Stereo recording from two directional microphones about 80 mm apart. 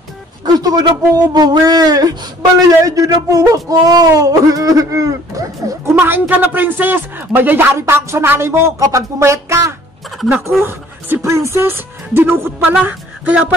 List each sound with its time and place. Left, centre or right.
0.6 s speech: right
5.9 s speech: right